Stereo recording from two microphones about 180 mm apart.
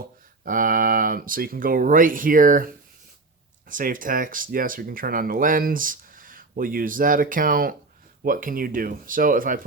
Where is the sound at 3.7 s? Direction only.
50° right (ahead or behind).